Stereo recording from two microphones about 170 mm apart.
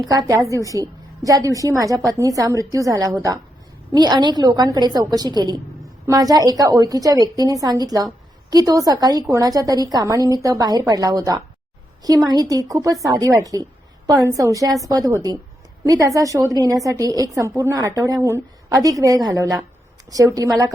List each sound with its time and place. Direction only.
0.0 s a woman's voice: 20° right (ahead or behind)